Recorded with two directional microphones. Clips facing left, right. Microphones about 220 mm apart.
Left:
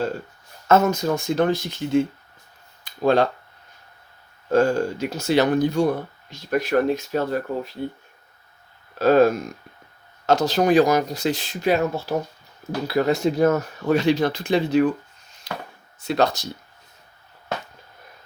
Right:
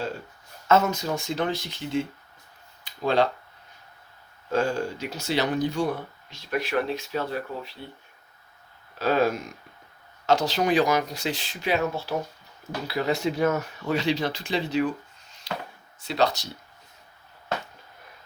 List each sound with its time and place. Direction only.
0.7 s speech: 45° left (ahead or behind)
4.5 s speech: 45° left (ahead or behind)
9.0 s speech: 50° left (ahead or behind)
15.5 s chop: 50° left (ahead or behind)
16.0 s speech: 45° left (ahead or behind)